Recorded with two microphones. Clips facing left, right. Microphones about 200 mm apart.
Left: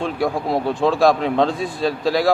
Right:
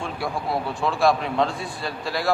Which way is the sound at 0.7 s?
90° left.